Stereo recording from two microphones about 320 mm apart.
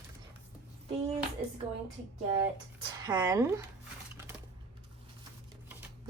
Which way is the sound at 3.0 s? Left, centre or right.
Centre.